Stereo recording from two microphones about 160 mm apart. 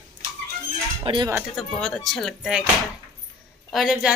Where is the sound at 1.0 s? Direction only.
30° right (ahead or behind).